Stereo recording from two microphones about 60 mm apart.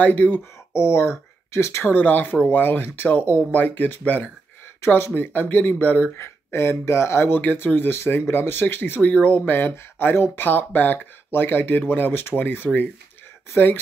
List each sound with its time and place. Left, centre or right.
0.0 s speech: left
0.7 s speech: left
1.9 s speech: left
4.8 s speech: left
6.1 s speech: left
9.0 s speech: left